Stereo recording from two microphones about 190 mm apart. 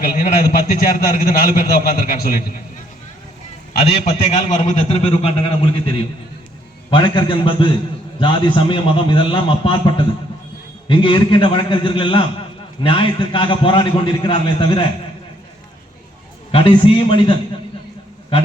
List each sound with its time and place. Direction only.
0.0 s a man's voice: 45° left (ahead or behind)
4.0 s a man's voice: 35° left (ahead or behind)
16.5 s a man's voice: 30° left (ahead or behind)